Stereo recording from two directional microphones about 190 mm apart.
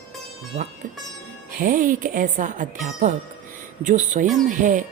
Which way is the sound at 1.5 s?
45° right (ahead or behind).